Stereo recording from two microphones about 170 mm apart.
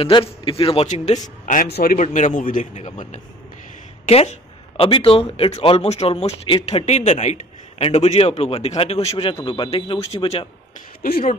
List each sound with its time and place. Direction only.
0.0 s a man's voice: 35° left (ahead or behind); by 1.7 s 50° left (ahead or behind)
1.7 s a man's voice: 65° left (ahead or behind)
2.0 s a man's voice: 45° left (ahead or behind)
11.0 s speech: 60° left (ahead or behind)